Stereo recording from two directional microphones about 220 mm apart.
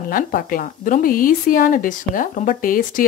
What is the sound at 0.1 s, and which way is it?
Speech, 40° left (ahead or behind).